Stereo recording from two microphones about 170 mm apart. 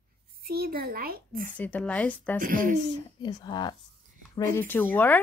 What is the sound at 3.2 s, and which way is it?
Speech, 25° left (ahead or behind).